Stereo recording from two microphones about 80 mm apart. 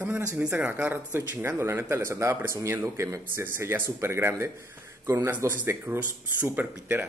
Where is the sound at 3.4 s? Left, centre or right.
Right.